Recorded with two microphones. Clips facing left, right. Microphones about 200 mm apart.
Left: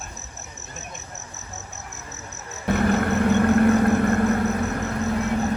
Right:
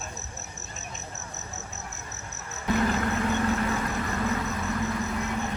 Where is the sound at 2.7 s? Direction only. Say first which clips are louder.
Left 5 dB; 60° left (ahead or behind).